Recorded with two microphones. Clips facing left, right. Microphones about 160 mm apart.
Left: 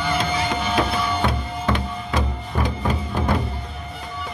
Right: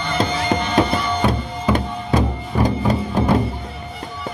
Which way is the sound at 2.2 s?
40° right (ahead or behind).